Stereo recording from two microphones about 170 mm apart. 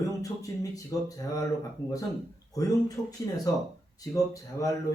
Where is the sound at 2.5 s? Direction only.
20° left (ahead or behind).